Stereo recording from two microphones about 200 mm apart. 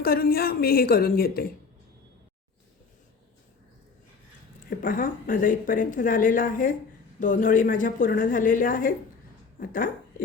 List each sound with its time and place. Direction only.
0.0 s speech: 50° left (ahead or behind)
4.8 s a woman's voice: 45° left (ahead or behind)